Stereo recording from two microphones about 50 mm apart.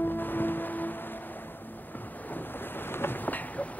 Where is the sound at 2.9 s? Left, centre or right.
Left.